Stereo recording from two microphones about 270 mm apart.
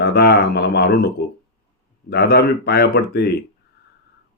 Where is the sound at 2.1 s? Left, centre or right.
Left.